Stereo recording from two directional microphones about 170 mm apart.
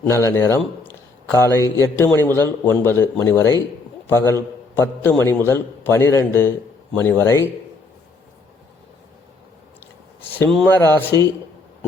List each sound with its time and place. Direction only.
0.0 s a man's voice: 15° left (ahead or behind)
0.9 s a sound: 15° left (ahead or behind)
1.8 s a man's voice: 15° left (ahead or behind)
10.2 s a man's voice: 10° left (ahead or behind)